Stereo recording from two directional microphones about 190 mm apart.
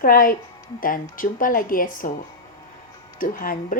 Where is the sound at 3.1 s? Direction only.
45° left (ahead or behind).